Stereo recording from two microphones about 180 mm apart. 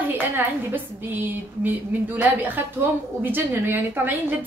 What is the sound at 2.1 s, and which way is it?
A woman's voice, 10° right (ahead or behind).